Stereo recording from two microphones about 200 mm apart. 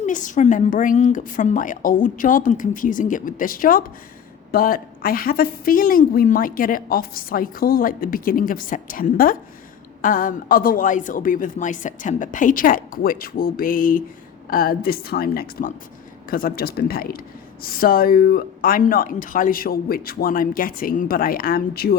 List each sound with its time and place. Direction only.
0.0 s a woman's voice: 40° left (ahead or behind)